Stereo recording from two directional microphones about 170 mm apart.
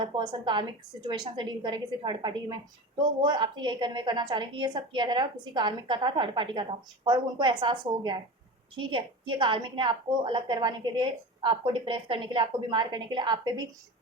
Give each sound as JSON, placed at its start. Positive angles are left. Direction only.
{"t": 0.0, "sound": "a woman's voice", "side_deg": -25}